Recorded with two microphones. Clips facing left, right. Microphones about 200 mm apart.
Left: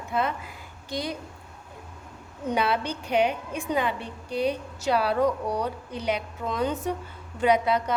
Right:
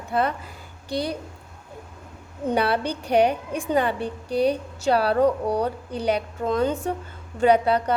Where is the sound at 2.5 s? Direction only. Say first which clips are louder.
Right 3 dB; 35° right (ahead or behind).